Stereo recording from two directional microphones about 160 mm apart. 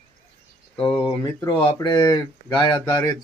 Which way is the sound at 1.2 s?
25° left (ahead or behind).